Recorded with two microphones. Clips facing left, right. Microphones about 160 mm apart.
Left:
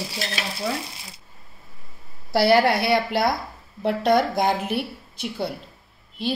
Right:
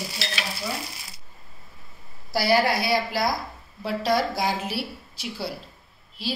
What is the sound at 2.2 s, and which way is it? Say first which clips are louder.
A woman's voice: left 4 dB; 60° left (ahead or behind).